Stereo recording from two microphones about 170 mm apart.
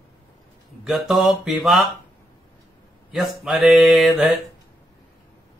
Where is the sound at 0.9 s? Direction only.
Centre (ahead or behind).